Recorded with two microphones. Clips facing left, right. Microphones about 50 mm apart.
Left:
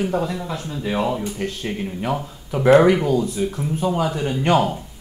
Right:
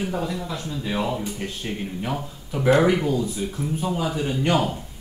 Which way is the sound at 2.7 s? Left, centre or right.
Left.